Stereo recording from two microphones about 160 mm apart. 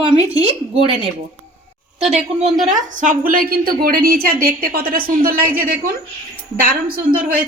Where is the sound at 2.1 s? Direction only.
40° right (ahead or behind); by 7.4 s 65° right (ahead or behind).